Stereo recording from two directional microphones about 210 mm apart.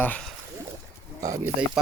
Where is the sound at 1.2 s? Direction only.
15° right (ahead or behind).